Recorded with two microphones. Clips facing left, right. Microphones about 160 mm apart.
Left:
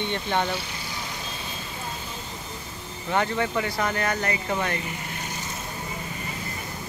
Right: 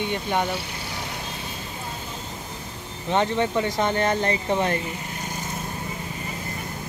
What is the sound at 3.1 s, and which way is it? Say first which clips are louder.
Speech: right 3 dB; 20° right (ahead or behind).